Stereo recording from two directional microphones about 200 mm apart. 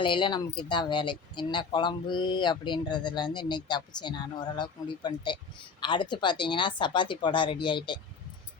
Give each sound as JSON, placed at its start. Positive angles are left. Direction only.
{"t": 0.0, "sound": "speech", "side_deg": 25}